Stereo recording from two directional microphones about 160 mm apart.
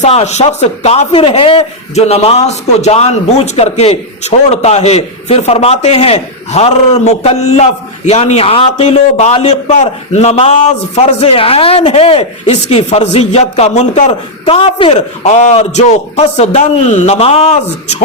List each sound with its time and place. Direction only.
0.0 s a man's voice: 40° left (ahead or behind)
14.4 s a man's voice: 35° left (ahead or behind)